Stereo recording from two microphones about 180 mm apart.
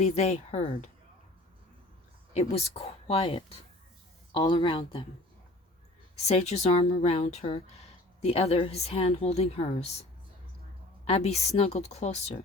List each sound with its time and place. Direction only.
0.0 s a woman's voice: 35° left (ahead or behind)
2.3 s a woman's voice: 35° left (ahead or behind)
6.1 s a woman's voice: 35° left (ahead or behind)